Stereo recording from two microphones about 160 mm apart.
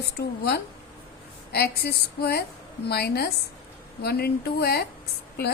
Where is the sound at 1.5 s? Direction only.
85° left.